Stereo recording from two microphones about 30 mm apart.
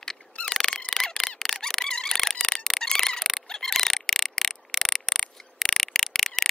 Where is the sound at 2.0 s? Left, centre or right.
Centre.